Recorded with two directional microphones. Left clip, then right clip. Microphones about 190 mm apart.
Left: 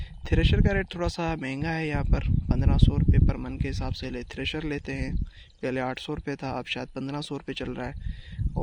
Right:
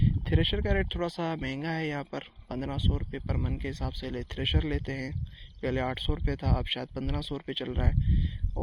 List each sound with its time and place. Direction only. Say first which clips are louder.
0.0 s speech: left 1 dB; 35° left (ahead or behind)